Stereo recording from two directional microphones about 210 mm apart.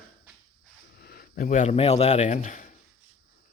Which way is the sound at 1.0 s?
45° left (ahead or behind).